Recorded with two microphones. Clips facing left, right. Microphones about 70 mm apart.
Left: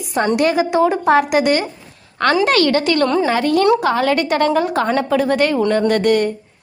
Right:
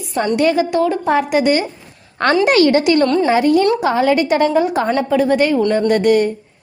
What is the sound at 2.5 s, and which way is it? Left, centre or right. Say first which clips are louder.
A woman's voice: right 3 dB; centre.